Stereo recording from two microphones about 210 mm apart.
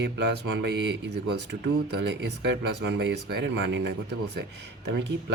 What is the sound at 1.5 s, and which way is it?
A man's voice, 55° right (ahead or behind).